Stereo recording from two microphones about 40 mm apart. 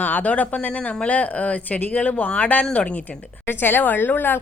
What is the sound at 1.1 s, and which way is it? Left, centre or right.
Speech, left.